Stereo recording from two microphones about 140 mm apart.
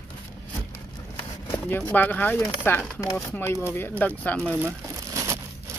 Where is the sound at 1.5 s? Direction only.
15° left (ahead or behind).